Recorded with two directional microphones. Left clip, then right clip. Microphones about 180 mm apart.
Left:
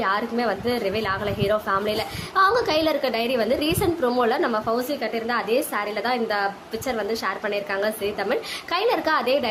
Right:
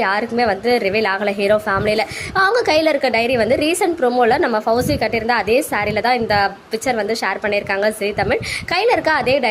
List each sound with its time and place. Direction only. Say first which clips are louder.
0.0 s a woman's voice: right 6 dB; 20° right (ahead or behind)